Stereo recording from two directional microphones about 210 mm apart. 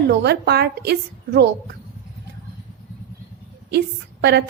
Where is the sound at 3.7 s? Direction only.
50° right (ahead or behind).